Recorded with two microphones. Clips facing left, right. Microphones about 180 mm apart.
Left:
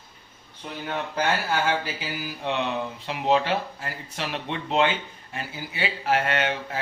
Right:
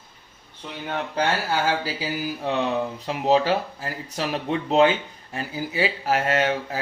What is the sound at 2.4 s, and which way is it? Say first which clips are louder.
Speech: right 2 dB; 40° right (ahead or behind).